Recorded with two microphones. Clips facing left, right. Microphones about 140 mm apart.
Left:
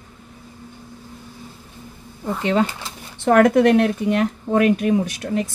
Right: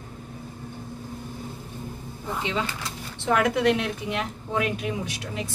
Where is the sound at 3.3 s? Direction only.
45° left (ahead or behind).